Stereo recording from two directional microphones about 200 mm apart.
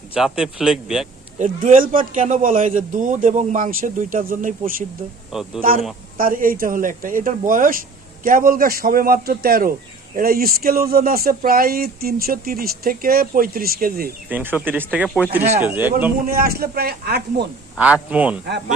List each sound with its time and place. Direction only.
0.1 s speech: 5° right (ahead or behind)
1.4 s a man's voice: 40° right (ahead or behind)
5.3 s speech: centre (ahead or behind)
6.1 s speech: 45° right (ahead or behind)
14.3 s a man's voice: 10° right (ahead or behind)
16.2 s speech: 45° right (ahead or behind)
17.7 s a man's voice: 5° right (ahead or behind)